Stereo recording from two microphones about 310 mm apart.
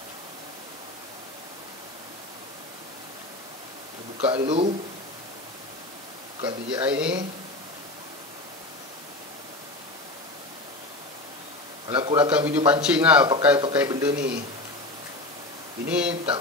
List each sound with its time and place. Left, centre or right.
4.2 s speech: centre
6.4 s speech: centre
6.9 s a man's voice: centre
11.9 s speech: centre
12.3 s a man's voice: centre
14.1 s speech: right
15.9 s a man's voice: centre